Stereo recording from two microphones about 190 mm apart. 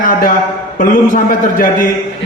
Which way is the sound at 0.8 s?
45° left (ahead or behind).